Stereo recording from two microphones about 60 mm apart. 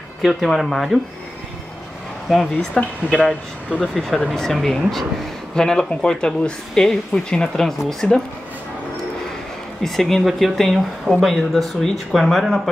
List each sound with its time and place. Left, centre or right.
0.2 s speech: centre
2.2 s speech: centre
3.8 s speech: centre
9.8 s speech: centre